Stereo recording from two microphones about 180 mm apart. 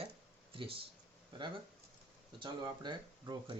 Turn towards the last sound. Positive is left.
turn(degrees=-25)  # may be behind; listen again after turning